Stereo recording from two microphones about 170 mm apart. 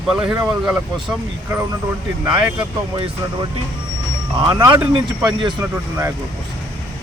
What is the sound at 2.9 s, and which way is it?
Speech, 25° right (ahead or behind).